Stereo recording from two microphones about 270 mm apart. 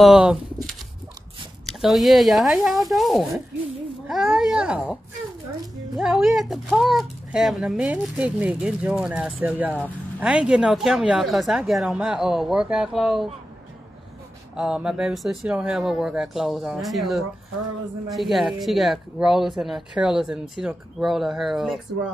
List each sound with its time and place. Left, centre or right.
0.0 s speech: centre
5.9 s speech: centre
14.5 s speech: centre